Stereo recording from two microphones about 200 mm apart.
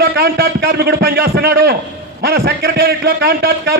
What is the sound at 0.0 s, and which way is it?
A man's voice, 50° right (ahead or behind).